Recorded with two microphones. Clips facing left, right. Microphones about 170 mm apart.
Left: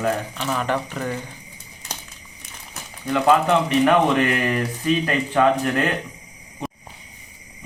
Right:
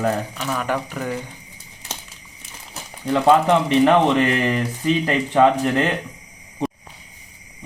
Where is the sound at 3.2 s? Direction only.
25° right (ahead or behind).